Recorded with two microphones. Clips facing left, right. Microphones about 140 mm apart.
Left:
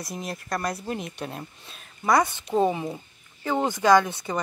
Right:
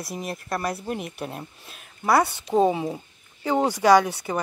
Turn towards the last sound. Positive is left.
turn(degrees=-10)  # may be behind; listen again after turning